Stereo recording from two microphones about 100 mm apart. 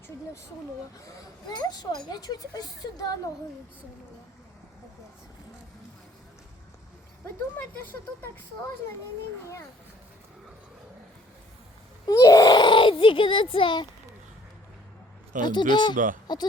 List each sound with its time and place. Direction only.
1.5 s speech: 45° left (ahead or behind)
12.0 s baby cry: 35° left (ahead or behind); by 13.8 s 60° left (ahead or behind)
15.4 s speech: 50° left (ahead or behind)